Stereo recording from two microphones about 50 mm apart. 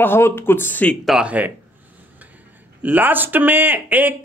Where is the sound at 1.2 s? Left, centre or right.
Right.